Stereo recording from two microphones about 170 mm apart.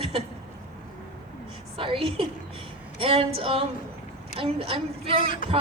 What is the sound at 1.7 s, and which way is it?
A woman's voice, 30° right (ahead or behind).